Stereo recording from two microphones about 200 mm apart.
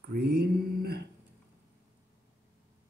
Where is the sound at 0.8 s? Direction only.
55° right (ahead or behind).